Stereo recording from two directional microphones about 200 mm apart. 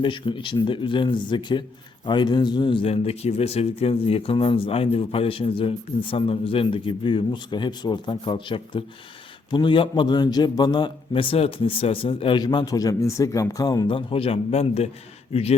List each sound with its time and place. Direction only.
0.0 s speech: 25° left (ahead or behind)